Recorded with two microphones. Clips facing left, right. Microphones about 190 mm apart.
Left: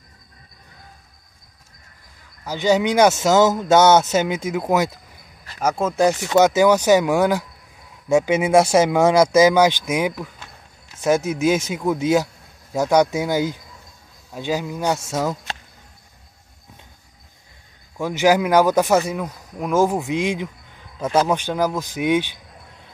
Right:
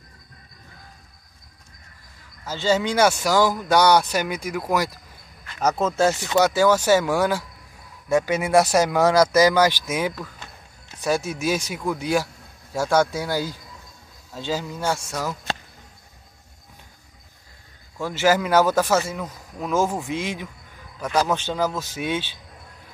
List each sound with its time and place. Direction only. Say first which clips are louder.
2.4 s speech: left 4 dB; 15° left (ahead or behind)
5.6 s speech: left 2 dB; 10° left (ahead or behind)
17.9 s speech: left 3 dB; 15° left (ahead or behind)